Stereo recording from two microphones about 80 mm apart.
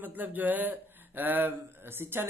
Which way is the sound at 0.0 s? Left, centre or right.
Right.